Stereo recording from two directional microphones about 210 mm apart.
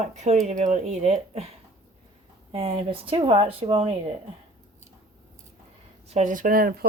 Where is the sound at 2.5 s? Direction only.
25° right (ahead or behind).